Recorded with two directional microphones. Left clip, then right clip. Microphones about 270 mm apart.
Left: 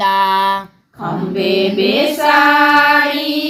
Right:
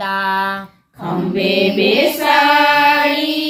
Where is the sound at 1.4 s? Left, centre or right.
Centre.